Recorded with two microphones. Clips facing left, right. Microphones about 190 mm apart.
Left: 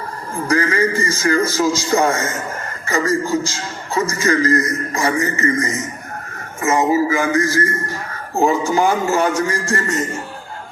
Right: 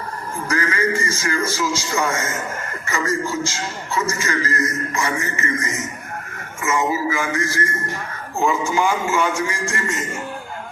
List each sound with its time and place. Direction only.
0.4 s a man's voice: 35° left (ahead or behind)